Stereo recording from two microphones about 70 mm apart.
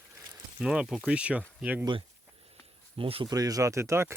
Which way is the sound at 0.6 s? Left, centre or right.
Centre.